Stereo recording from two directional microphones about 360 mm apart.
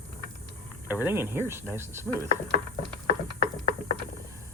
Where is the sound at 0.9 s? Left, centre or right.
Centre.